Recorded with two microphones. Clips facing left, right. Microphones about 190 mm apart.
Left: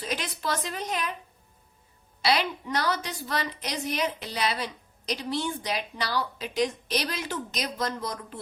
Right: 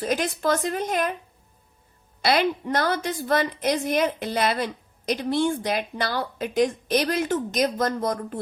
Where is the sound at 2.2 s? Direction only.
50° right (ahead or behind).